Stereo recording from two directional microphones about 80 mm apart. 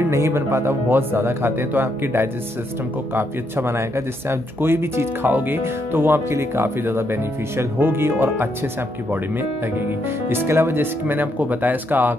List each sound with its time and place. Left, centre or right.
0.1 s speech: right
10.3 s speech: right